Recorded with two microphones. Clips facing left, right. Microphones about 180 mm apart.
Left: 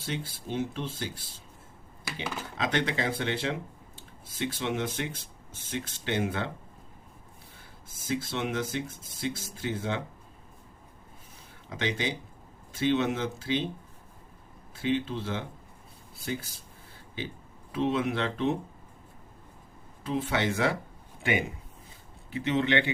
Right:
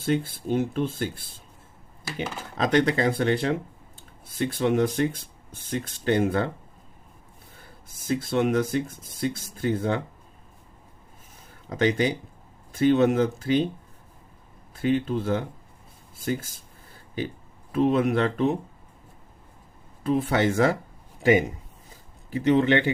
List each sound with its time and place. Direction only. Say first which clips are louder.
0.0 s speech: right 10 dB; 55° right (ahead or behind)
2.6 s speech: right 8 dB; 50° right (ahead or behind)
6.1 s speech: right 8 dB; 45° right (ahead or behind)
8.0 s speech: right 7 dB; 50° right (ahead or behind)
11.7 s speech: right 8 dB; 45° right (ahead or behind)
14.8 s speech: right 5 dB; 50° right (ahead or behind)
17.7 s speech: right 6 dB; 50° right (ahead or behind)
20.1 s speech: right 6 dB; 45° right (ahead or behind)